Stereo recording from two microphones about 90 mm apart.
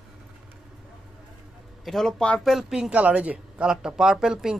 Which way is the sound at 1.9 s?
5° left (ahead or behind).